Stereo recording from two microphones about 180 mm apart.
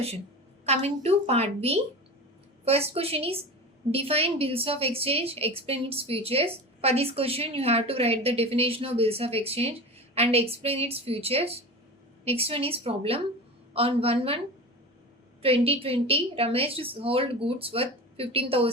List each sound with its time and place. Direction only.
0.6 s a woman's voice: 35° right (ahead or behind)